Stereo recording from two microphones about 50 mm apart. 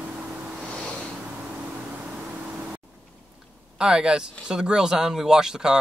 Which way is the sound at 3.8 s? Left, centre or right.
Centre.